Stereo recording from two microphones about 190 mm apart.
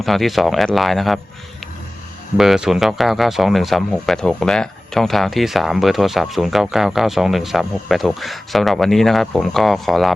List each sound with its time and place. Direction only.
0.0 s speech: centre (ahead or behind)
2.4 s speech: centre (ahead or behind)